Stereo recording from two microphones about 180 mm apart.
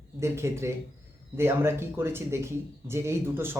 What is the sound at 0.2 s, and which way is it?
Speech, 15° right (ahead or behind).